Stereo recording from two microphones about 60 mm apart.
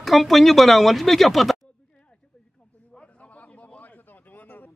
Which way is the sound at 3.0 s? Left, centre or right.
Left.